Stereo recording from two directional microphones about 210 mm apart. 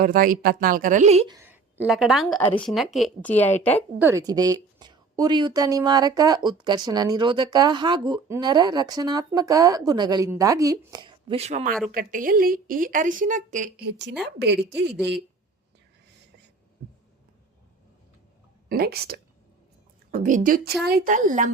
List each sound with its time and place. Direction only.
0.0 s a woman's voice: 40° right (ahead or behind)
1.4 s a woman's voice: 10° right (ahead or behind); by 3.8 s 10° left (ahead or behind)
3.9 s a woman's voice: 10° right (ahead or behind); by 14.9 s 55° right (ahead or behind)
16.8 s a sound: 45° right (ahead or behind)
18.7 s a woman's voice: 45° right (ahead or behind)